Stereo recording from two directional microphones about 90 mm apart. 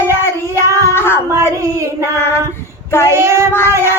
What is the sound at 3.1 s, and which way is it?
Child singing, 30° right (ahead or behind).